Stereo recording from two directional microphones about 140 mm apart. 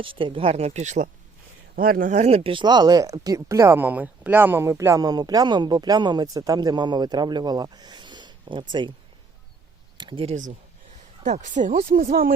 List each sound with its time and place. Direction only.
0.0 s speech: 40° right (ahead or behind); by 1.1 s 60° right (ahead or behind)
1.7 s speech: 90° right; by 8.6 s 35° right (ahead or behind)
10.0 s speech: 35° right (ahead or behind)
11.2 s speech: 60° right (ahead or behind); by 12.3 s 80° right